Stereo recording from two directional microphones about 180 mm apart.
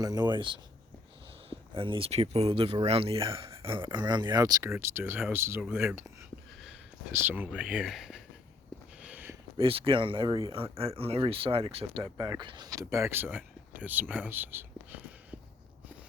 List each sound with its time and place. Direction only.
0.0 s speech: 20° right (ahead or behind)
7.1 s speech: 10° right (ahead or behind)
9.0 s a sound: 10° right (ahead or behind)
9.6 s speech: 30° right (ahead or behind); by 15.4 s 10° right (ahead or behind)